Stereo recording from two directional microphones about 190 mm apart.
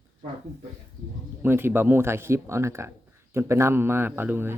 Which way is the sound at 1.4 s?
10° right (ahead or behind).